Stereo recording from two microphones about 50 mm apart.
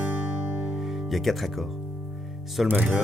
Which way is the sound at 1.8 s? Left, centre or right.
Right.